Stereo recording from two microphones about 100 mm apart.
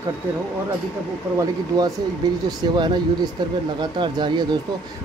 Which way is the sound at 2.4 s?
50° right (ahead or behind).